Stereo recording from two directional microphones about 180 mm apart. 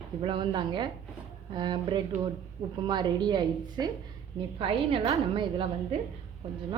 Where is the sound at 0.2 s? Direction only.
30° right (ahead or behind).